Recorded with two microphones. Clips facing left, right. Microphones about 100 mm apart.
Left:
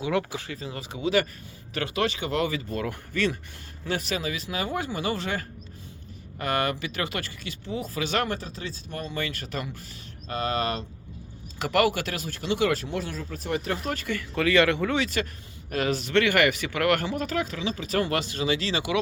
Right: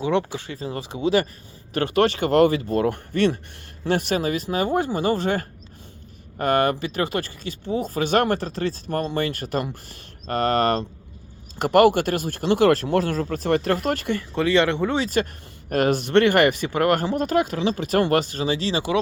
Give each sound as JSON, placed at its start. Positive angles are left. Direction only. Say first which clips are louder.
{"t": 0.0, "sound": "speech", "louder": "right 4 dB", "side_deg": -30}
{"t": 1.7, "sound": "speech", "louder": "right 7 dB", "side_deg": -50}
{"t": 2.5, "sound": "speech", "louder": "right 9 dB", "side_deg": -40}
{"t": 7.9, "sound": "speech", "louder": "right 7 dB", "side_deg": -50}
{"t": 9.1, "sound": "speech", "louder": "right 7 dB", "side_deg": -45}
{"t": 11.6, "sound": "speech", "louder": "right 8 dB", "side_deg": -50}
{"t": 12.7, "sound": "speech", "louder": "right 9 dB", "side_deg": -70}
{"t": 14.1, "sound": "speech", "louder": "right 2 dB", "side_deg": -30}
{"t": 15.7, "sound": "speech", "louder": "right 6 dB", "side_deg": -55}
{"t": 17.7, "sound": "speech", "louder": "right 6 dB", "side_deg": -55}